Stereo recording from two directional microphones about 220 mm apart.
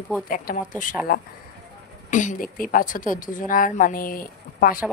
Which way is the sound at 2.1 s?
35° left (ahead or behind).